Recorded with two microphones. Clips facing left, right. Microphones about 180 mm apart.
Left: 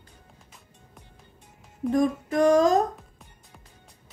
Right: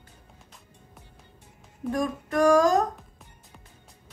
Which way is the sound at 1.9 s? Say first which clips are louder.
Left 3 dB; 25° left (ahead or behind).